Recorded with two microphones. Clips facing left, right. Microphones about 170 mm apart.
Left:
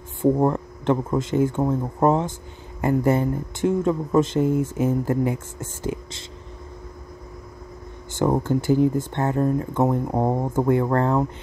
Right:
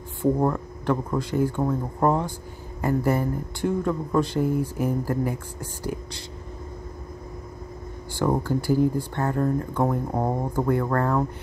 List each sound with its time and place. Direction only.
0.2 s speech: 20° left (ahead or behind)
8.1 s speech: 20° left (ahead or behind)